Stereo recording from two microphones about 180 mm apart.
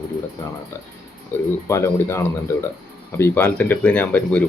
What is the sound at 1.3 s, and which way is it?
Speech, 10° left (ahead or behind).